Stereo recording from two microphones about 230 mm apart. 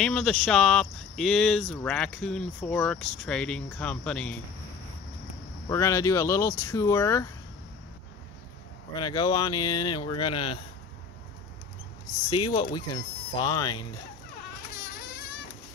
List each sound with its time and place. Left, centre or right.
0.0 s speech: centre
5.7 s speech: centre
8.9 s speech: centre
12.3 s speech: left
14.7 s baby cry: left